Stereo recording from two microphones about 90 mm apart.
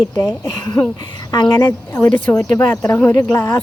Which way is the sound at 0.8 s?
15° left (ahead or behind).